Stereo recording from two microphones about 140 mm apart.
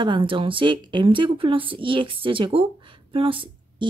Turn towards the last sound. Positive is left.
turn(degrees=-40)  # may be behind; listen again after turning